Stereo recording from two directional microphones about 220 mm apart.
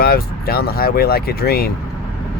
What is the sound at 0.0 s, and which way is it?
Speech, 40° left (ahead or behind).